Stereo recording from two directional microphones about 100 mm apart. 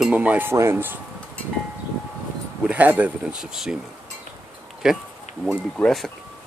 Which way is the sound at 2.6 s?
15° right (ahead or behind).